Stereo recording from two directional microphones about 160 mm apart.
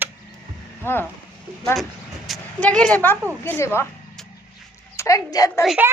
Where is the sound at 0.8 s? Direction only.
15° left (ahead or behind).